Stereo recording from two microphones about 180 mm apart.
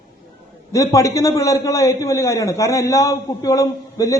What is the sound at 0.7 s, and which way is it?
A man's voice, 20° left (ahead or behind).